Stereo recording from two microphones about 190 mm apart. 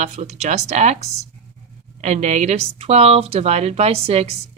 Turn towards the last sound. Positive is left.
turn(degrees=-35)  # may be behind; listen again after turning